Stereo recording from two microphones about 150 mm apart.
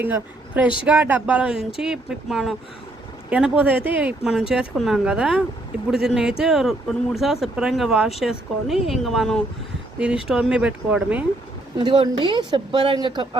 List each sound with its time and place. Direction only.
0.0 s speech: 10° right (ahead or behind)
11.8 s speech: 30° right (ahead or behind)